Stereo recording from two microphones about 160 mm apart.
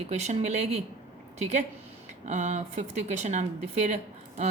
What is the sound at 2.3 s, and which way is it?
Speech, 45° right (ahead or behind).